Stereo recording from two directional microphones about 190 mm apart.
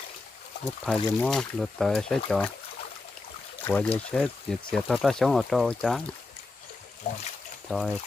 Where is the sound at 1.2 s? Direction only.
Centre (ahead or behind).